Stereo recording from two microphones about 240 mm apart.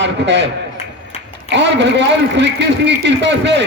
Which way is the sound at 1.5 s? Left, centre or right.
Right.